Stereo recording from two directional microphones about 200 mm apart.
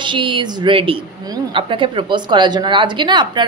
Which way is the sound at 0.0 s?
25° right (ahead or behind).